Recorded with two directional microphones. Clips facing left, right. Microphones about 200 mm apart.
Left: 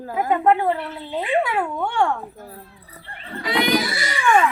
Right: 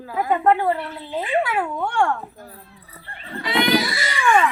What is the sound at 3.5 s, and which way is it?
Children playing, centre (ahead or behind).